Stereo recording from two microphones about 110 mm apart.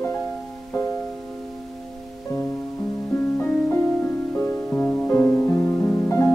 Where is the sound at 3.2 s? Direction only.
20° left (ahead or behind).